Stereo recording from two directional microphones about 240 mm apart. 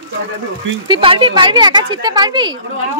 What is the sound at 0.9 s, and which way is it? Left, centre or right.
A woman's voice, right.